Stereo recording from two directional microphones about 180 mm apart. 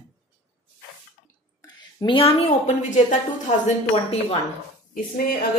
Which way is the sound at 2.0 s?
30° left (ahead or behind).